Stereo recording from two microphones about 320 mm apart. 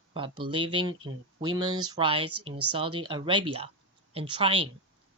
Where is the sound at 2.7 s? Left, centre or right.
Centre.